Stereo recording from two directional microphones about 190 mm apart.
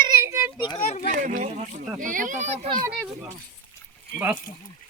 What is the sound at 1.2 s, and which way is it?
A child's voice, 45° right (ahead or behind).